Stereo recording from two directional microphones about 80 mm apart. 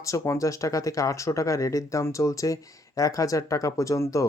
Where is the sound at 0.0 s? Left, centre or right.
Left.